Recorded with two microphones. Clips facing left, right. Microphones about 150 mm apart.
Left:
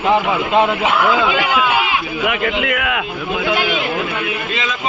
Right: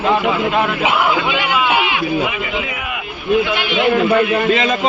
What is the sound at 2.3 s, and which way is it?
Speech, 65° left (ahead or behind).